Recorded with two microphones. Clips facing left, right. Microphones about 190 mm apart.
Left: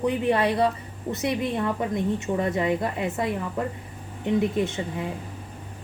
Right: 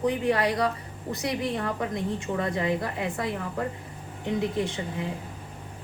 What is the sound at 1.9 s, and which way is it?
A woman's voice, 20° left (ahead or behind).